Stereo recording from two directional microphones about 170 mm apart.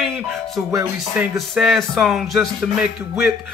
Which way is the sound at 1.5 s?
Centre (ahead or behind).